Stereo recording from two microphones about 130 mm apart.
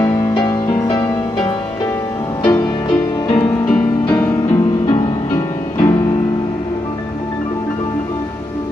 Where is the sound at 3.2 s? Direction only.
40° left (ahead or behind).